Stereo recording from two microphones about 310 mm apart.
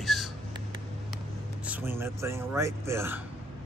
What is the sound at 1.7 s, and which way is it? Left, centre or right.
Speech, centre.